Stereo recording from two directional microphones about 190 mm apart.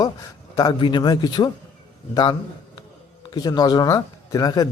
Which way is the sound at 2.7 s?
25° left (ahead or behind).